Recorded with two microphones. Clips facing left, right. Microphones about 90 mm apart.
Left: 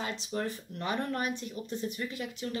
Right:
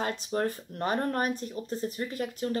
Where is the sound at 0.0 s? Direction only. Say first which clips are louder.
Right 5 dB; 50° right (ahead or behind).